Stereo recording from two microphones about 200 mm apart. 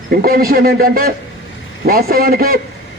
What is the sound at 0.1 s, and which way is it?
A man's voice, 50° right (ahead or behind).